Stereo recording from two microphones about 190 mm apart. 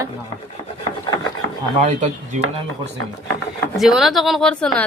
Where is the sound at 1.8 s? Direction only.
40° right (ahead or behind).